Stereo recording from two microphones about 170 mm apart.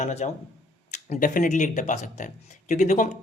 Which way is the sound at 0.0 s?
40° left (ahead or behind).